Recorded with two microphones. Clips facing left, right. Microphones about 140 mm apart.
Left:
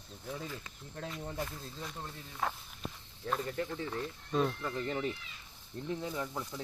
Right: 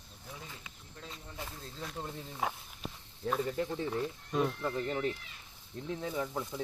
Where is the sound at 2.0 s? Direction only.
15° right (ahead or behind).